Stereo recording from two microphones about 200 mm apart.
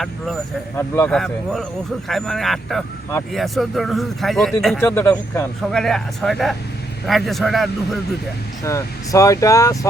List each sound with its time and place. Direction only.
0.8 s speech: 10° left (ahead or behind)
4.8 s speech: 10° left (ahead or behind)
5.7 s speech: centre (ahead or behind)
8.6 s speech: 15° left (ahead or behind)